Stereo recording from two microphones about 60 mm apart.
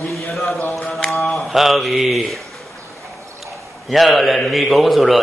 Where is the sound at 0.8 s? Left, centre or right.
Centre.